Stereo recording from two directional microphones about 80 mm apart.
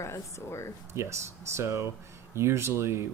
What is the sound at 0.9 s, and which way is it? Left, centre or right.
Speech, right.